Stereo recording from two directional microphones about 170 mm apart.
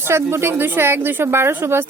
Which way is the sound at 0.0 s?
15° right (ahead or behind).